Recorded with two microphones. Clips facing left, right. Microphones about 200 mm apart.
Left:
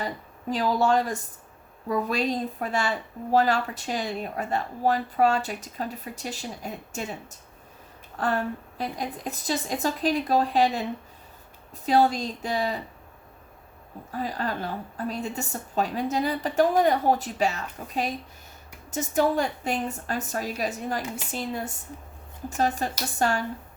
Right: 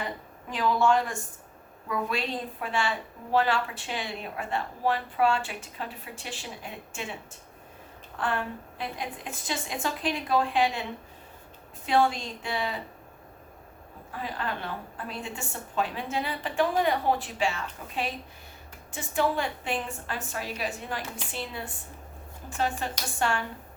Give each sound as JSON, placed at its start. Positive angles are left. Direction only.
{"t": 0.5, "sound": "speech", "side_deg": 40}
{"t": 11.9, "sound": "speech", "side_deg": 40}
{"t": 14.1, "sound": "a woman's voice", "side_deg": 40}